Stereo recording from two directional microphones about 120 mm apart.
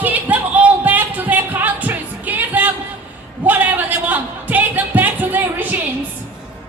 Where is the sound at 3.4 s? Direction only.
15° right (ahead or behind).